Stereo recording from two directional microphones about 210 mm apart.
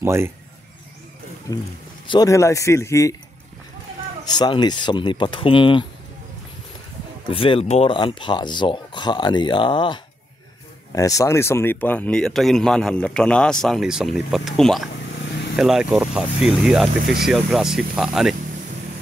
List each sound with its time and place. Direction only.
0.0 s speech: 10° right (ahead or behind)
1.5 s speech: 15° left (ahead or behind)
4.3 s speech: 20° left (ahead or behind)
7.2 s speech: 25° left (ahead or behind); by 18.3 s centre (ahead or behind)